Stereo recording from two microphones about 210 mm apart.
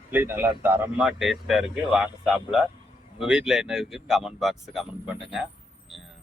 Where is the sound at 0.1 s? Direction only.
10° right (ahead or behind).